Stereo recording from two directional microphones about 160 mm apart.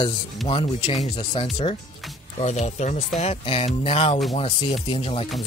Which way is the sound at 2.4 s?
45° left (ahead or behind).